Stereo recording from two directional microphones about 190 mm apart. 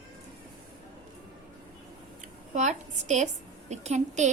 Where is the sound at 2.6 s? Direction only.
40° right (ahead or behind).